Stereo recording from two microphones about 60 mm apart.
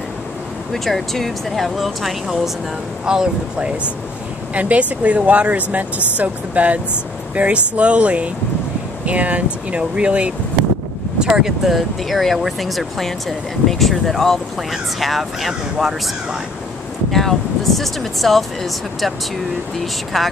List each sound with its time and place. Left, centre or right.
0.8 s speech: centre
3.1 s speech: centre
17.1 s speech: centre
20.1 s speech: centre